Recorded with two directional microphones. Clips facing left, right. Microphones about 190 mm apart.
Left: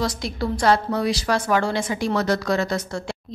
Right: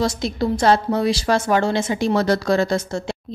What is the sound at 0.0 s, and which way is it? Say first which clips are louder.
A woman's voice: right 4 dB; 25° right (ahead or behind).